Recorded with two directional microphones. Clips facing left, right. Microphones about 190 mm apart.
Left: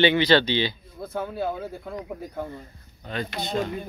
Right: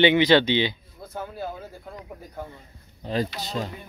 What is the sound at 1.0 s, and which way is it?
Speech, 60° left (ahead or behind).